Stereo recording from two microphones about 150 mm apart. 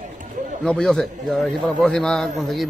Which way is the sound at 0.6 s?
5° left (ahead or behind).